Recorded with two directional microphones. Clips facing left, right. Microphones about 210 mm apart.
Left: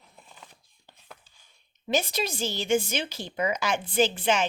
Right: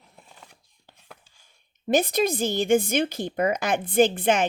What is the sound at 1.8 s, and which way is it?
A woman's voice, 55° right (ahead or behind).